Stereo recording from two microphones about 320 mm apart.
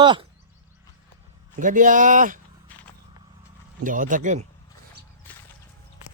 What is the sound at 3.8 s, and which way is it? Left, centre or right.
Speech, right.